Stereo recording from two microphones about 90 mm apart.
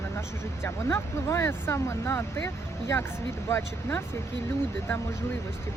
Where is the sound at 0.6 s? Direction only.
30° left (ahead or behind).